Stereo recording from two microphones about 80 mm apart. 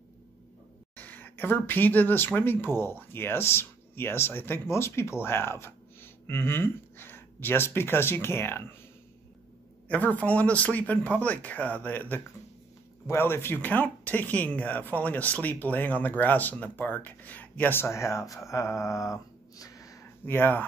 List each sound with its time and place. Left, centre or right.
0.9 s speech: left
9.8 s speech: centre; by 18.2 s left
18.5 s a sound: left
20.2 s speech: left